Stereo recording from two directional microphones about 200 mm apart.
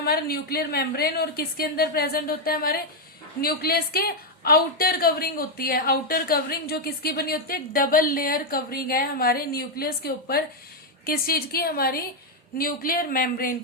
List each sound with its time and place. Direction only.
0.0 s a woman's voice: 50° left (ahead or behind)